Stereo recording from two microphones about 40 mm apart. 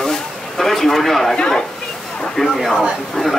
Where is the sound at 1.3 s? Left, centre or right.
Centre.